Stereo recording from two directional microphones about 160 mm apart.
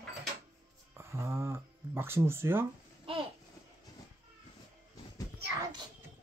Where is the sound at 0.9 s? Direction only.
15° right (ahead or behind).